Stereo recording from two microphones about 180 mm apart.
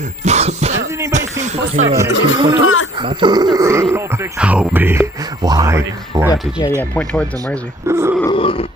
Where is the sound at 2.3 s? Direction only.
20° right (ahead or behind).